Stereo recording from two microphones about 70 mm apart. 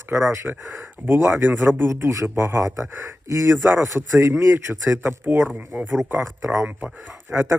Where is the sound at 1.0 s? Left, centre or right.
Right.